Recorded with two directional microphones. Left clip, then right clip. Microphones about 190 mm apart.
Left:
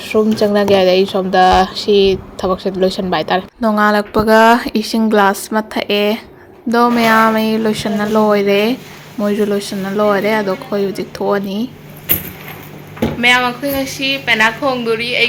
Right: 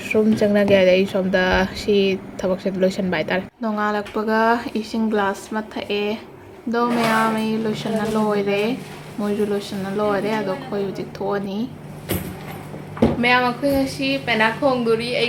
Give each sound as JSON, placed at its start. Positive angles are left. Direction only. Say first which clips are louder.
{"t": 0.4, "sound": "speech", "louder": "left 3 dB", "side_deg": 30}
{"t": 3.6, "sound": "speech", "louder": "left 10 dB", "side_deg": 45}
{"t": 13.2, "sound": "a woman's voice", "louder": "left 7 dB", "side_deg": 10}